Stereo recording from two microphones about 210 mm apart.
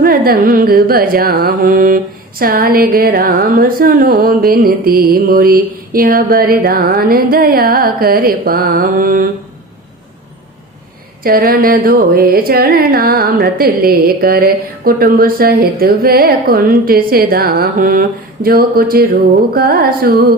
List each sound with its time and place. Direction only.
0.0 s music: 45° right (ahead or behind)
11.2 s music: 45° right (ahead or behind)